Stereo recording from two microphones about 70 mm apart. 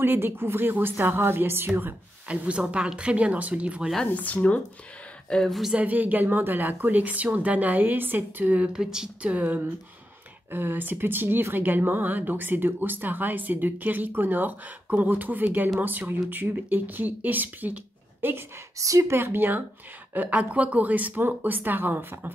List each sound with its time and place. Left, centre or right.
0.0 s speech: right
2.2 s speech: centre
4.1 s speech: left
5.3 s speech: centre
5.8 s speech: right
18.8 s speech: right
19.1 s speech: right